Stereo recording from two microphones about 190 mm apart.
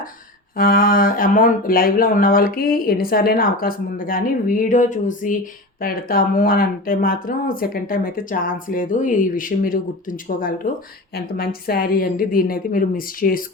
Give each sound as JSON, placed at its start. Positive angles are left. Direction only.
{"t": 0.5, "sound": "speech", "side_deg": 50}